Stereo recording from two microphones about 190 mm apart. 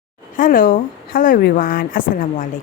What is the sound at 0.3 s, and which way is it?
Speech, 45° left (ahead or behind).